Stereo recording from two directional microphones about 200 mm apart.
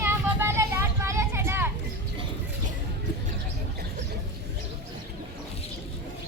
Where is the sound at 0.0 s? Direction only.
10° right (ahead or behind).